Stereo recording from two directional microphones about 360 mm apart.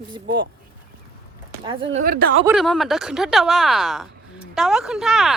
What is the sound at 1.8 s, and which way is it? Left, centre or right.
Speech, right.